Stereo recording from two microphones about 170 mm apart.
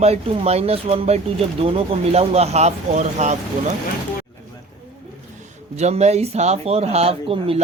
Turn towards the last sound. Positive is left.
turn(degrees=-35)  # may be behind; listen again after turning